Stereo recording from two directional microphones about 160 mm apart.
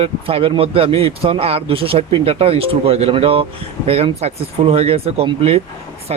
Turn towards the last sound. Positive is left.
turn(degrees=-40)  # may be behind; listen again after turning